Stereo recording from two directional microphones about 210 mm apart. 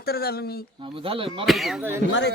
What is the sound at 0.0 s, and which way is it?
Speech, 45° left (ahead or behind).